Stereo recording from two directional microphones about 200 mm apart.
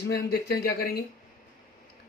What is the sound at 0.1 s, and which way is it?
Speech, 50° left (ahead or behind).